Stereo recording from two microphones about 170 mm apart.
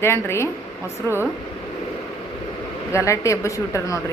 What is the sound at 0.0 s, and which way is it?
Speech, 15° left (ahead or behind).